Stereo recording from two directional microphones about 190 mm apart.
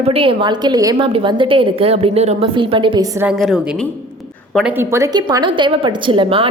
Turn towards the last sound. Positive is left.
turn(degrees=-30)  # may be behind; listen again after turning